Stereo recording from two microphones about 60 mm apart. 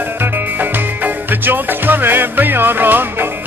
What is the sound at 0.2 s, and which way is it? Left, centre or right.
Music, right.